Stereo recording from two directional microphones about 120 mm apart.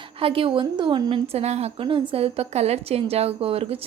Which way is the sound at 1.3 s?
60° right (ahead or behind).